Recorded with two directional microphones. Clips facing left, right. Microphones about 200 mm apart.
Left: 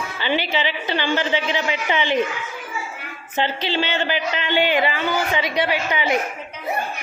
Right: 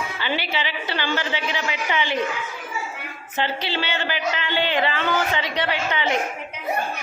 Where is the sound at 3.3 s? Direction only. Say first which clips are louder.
Left 3 dB; 20° left (ahead or behind).